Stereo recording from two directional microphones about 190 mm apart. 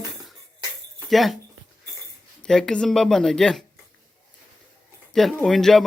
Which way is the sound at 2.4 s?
5° left (ahead or behind).